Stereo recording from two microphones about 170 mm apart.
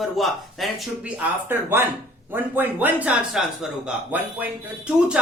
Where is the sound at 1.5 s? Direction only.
10° right (ahead or behind).